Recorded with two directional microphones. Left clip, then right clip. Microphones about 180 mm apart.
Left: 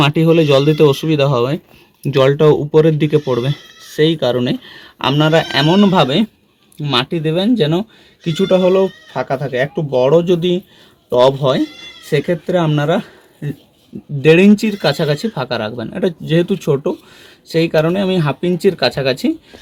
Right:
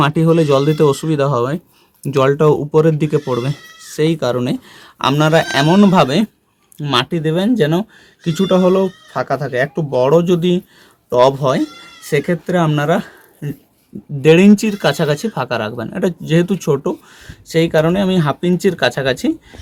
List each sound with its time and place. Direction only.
0.0 s speech: 20° left (ahead or behind)
7.6 s speech: 15° left (ahead or behind)
8.3 s speech: centre (ahead or behind)
11.1 s speech: 10° left (ahead or behind)